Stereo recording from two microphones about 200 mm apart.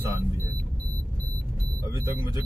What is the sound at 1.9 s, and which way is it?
Speech, 15° right (ahead or behind).